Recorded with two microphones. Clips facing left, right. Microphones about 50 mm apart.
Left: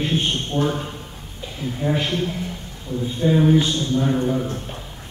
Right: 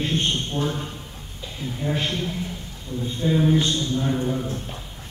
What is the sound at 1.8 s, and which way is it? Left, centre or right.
Speech, centre.